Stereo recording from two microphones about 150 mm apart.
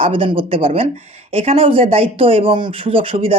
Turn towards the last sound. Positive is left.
turn(degrees=-35)  # may be behind; listen again after turning